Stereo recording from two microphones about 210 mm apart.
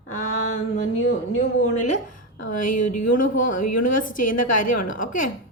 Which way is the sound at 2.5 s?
40° left (ahead or behind).